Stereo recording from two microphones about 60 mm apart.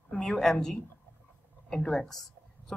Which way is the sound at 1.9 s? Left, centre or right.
Centre.